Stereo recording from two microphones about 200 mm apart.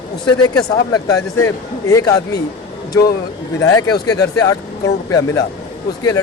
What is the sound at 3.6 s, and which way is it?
Speech, 20° left (ahead or behind).